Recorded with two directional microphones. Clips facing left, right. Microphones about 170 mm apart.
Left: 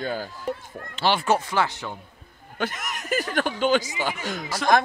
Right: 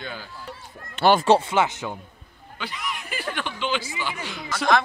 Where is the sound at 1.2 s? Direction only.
30° right (ahead or behind).